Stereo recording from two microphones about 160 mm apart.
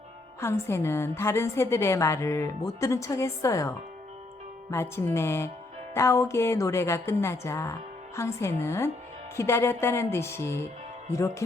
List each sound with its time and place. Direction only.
0.3 s a woman's voice: 15° left (ahead or behind)